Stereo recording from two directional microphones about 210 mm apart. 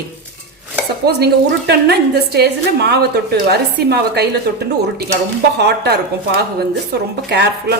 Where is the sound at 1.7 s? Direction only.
50° right (ahead or behind).